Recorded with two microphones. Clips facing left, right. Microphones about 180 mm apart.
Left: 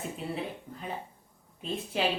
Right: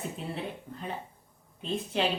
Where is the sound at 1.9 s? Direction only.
5° left (ahead or behind).